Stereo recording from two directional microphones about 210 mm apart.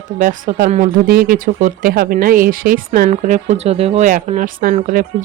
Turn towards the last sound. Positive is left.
turn(degrees=-40)  # may be behind; listen again after turning